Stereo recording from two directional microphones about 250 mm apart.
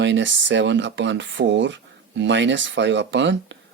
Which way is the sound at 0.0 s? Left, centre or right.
Right.